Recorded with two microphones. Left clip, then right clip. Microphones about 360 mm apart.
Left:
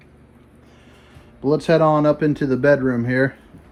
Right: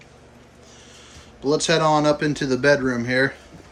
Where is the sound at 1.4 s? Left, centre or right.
Centre.